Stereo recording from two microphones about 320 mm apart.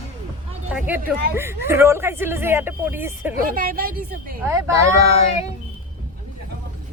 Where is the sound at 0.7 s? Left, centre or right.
Centre.